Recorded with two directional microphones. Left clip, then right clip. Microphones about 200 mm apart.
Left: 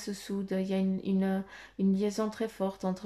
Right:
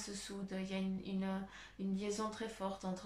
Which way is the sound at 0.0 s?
40° left (ahead or behind).